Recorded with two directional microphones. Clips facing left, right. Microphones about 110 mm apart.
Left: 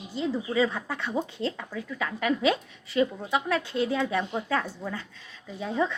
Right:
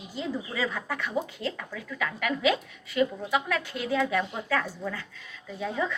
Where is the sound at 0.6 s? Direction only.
25° left (ahead or behind).